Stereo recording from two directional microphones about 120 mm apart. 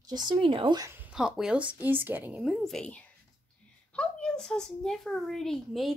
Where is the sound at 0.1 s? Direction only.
40° right (ahead or behind).